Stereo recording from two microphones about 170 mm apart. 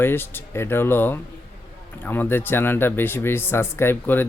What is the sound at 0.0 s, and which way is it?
Speech, 15° left (ahead or behind).